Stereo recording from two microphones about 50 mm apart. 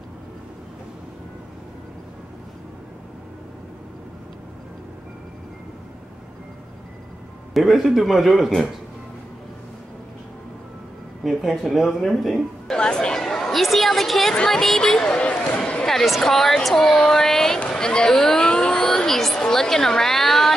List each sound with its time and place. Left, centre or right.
7.5 s a woman's voice: centre
11.2 s a woman's voice: centre
12.7 s a woman's voice: centre
15.8 s a woman's voice: centre
17.6 s a sound: centre
18.9 s a woman's voice: centre